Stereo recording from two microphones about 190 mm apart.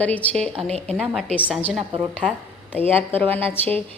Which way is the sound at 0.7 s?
35° right (ahead or behind).